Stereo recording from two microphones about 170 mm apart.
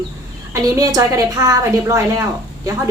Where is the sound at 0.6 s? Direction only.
20° right (ahead or behind).